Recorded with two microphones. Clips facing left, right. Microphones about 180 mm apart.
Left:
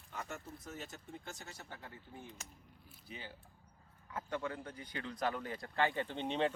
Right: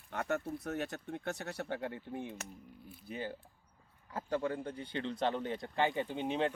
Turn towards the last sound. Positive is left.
turn(degrees=-5)  # may be behind; listen again after turning